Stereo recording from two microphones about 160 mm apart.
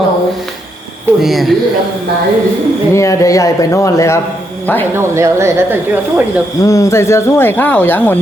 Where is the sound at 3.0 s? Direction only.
20° left (ahead or behind).